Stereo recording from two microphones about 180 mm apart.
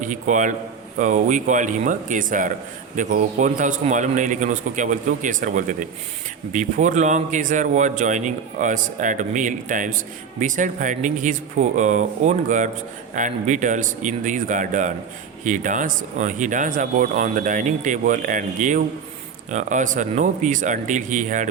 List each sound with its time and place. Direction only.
0.0 s a man's voice: 45° right (ahead or behind)